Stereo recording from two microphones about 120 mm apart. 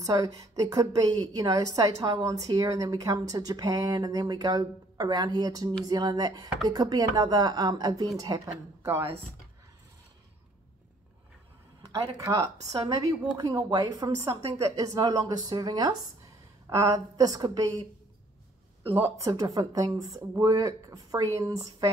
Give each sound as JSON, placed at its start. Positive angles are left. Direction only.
{"t": 0.0, "sound": "a woman's voice", "side_deg": -35}
{"t": 8.8, "sound": "speech", "side_deg": -20}
{"t": 11.8, "sound": "a sound", "side_deg": -35}
{"t": 12.2, "sound": "speech", "side_deg": -25}
{"t": 12.7, "sound": "a woman's voice", "side_deg": -40}
{"t": 19.0, "sound": "speech", "side_deg": -25}